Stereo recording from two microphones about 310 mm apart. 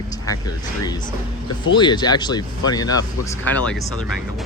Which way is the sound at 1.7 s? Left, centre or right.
Centre.